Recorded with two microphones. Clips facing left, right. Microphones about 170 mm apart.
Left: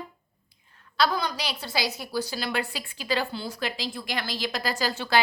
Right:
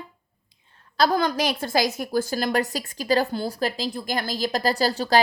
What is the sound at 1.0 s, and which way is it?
A woman's voice, 50° right (ahead or behind).